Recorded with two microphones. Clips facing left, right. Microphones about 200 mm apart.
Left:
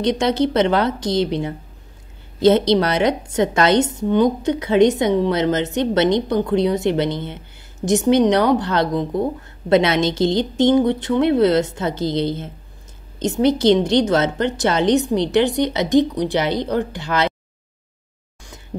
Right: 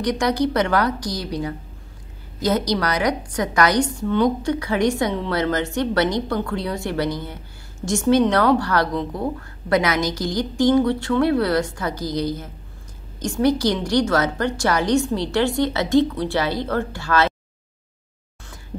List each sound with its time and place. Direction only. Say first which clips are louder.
0.0 s a woman's voice: left 3 dB; 25° left (ahead or behind)